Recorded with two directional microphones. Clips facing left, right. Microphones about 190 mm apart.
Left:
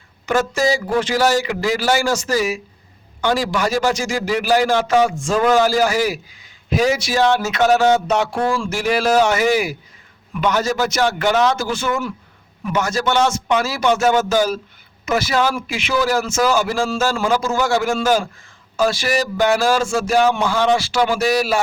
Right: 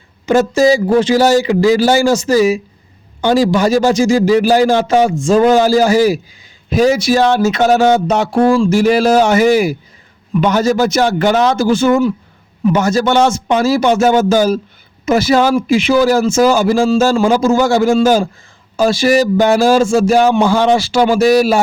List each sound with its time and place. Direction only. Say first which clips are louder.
0.3 s a man's voice: right 7 dB; 25° right (ahead or behind)
6.7 s a sound: right 7 dB; 35° right (ahead or behind)
15.6 s a man's voice: right 9 dB; 35° right (ahead or behind)